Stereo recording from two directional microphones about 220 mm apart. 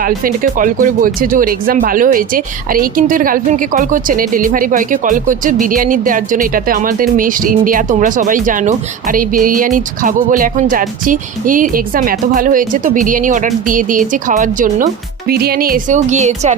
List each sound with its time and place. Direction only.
0.0 s speech: 40° right (ahead or behind)